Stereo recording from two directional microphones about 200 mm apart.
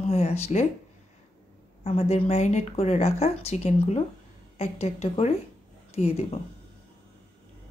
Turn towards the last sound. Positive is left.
turn(degrees=30)  # may be behind; listen again after turning